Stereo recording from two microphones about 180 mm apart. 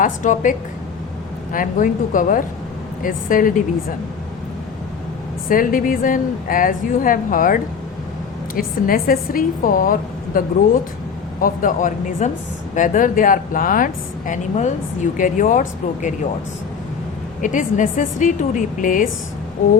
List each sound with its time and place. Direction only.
0.0 s a woman's voice: 45° left (ahead or behind)
1.5 s a woman's voice: 45° left (ahead or behind)
5.5 s a woman's voice: 50° left (ahead or behind)
17.4 s a woman's voice: 45° left (ahead or behind)